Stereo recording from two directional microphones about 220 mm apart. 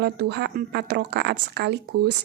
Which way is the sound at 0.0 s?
50° right (ahead or behind).